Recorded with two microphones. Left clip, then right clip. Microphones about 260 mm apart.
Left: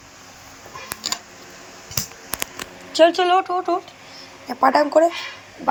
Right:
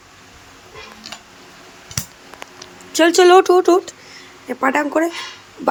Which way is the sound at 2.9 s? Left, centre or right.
Right.